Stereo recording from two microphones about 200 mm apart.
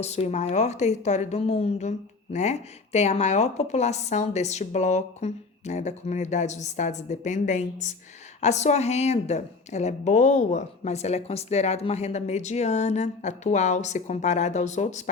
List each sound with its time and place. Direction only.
0.0 s speech: 35° left (ahead or behind)